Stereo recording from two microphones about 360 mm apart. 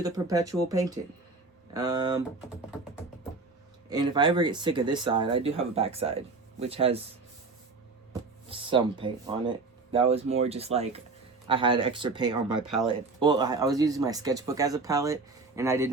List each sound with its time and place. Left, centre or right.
0.0 s speech: centre
3.8 s speech: centre
8.4 s speech: centre
12.6 s speech: centre
13.1 s speech: centre